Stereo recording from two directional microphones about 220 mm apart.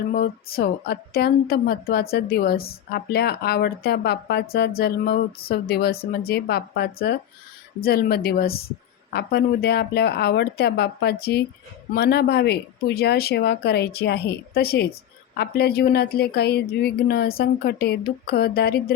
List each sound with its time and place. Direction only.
0.1 s speech: 45° left (ahead or behind)